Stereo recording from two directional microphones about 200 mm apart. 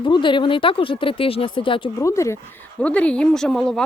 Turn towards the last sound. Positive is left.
turn(degrees=5)  # may be behind; listen again after turning